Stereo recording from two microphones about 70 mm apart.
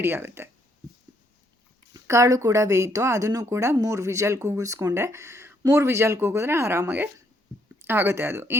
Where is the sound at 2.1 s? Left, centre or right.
Right.